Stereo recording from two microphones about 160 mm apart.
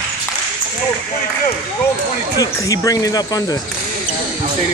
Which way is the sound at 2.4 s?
20° left (ahead or behind).